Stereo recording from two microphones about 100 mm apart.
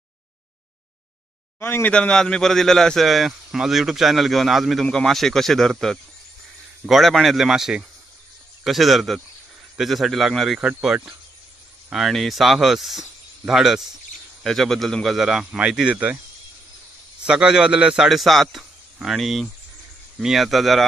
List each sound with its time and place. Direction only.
1.6 s speech: 20° left (ahead or behind)
1.9 s a man's voice: 10° left (ahead or behind)
11.9 s a man's voice: centre (ahead or behind)
17.2 s a man's voice: 10° right (ahead or behind)